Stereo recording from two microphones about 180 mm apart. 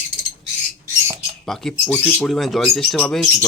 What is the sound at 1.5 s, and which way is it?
Speech, centre (ahead or behind).